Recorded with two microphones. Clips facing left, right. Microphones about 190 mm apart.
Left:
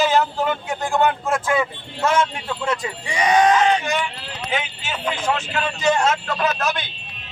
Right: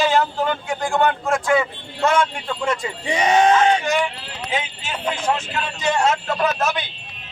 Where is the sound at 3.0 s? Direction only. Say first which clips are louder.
Right 1 dB; 25° right (ahead or behind).